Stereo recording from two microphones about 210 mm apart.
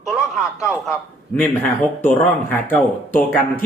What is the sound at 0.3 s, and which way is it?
Speech, centre (ahead or behind).